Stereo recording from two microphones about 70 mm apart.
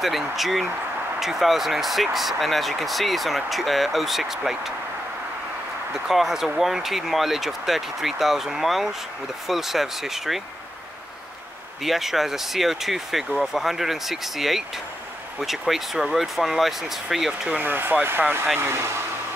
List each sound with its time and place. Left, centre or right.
0.0 s speech: centre
5.9 s speech: centre
11.8 s speech: centre
17.3 s speech: centre
17.6 s speech: right